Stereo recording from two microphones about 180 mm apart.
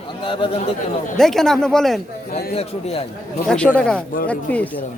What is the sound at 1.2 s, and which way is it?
Speech, centre (ahead or behind).